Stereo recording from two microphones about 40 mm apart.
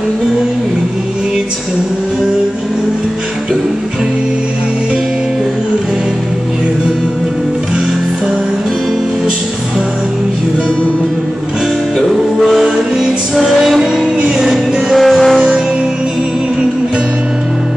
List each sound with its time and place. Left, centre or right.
12.0 s music: centre
12.6 s music: centre
14.4 s music: centre